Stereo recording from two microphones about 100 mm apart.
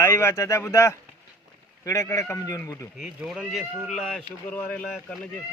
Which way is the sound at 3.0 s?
5° right (ahead or behind).